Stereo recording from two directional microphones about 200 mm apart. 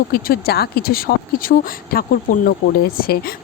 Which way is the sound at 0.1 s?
50° left (ahead or behind).